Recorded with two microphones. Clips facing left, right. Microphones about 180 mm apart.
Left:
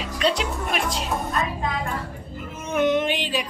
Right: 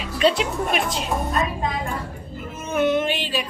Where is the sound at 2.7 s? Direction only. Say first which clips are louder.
Even; 15° left (ahead or behind).